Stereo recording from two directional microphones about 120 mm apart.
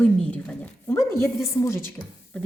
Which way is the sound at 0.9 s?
20° left (ahead or behind).